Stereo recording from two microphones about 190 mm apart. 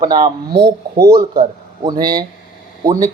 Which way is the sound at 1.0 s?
55° right (ahead or behind).